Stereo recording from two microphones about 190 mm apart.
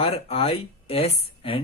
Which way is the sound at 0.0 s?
30° left (ahead or behind).